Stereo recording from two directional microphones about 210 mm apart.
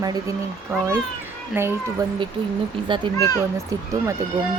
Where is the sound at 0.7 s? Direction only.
10° right (ahead or behind).